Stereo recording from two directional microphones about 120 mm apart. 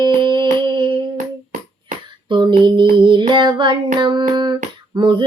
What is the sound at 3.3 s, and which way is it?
Child singing, 40° right (ahead or behind).